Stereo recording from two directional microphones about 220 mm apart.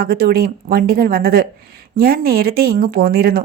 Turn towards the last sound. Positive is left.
turn(degrees=-45)  # may be behind; listen again after turning